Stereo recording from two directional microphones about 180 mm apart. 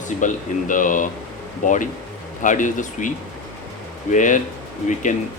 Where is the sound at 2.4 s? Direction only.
45° left (ahead or behind).